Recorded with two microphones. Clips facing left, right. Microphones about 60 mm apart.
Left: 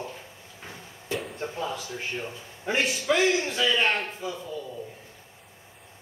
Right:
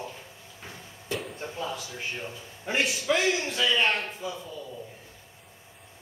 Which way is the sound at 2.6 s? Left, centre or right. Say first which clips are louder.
Left 1 dB; left.